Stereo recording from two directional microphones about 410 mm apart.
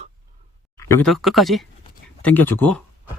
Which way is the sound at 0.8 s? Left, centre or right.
Centre.